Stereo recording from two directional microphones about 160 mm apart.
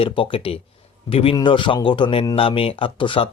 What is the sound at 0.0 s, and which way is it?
Speech, 35° left (ahead or behind).